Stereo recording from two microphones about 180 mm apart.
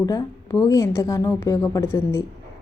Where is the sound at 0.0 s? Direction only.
20° left (ahead or behind).